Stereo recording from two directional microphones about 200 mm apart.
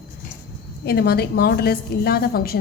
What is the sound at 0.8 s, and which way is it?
A woman's voice, 50° left (ahead or behind).